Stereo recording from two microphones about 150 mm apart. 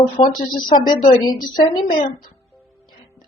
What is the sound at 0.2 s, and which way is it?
Speech, 45° left (ahead or behind).